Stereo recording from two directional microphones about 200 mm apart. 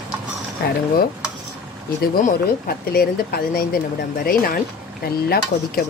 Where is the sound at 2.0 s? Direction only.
50° left (ahead or behind).